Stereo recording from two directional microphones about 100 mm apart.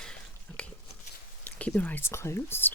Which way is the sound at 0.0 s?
10° left (ahead or behind).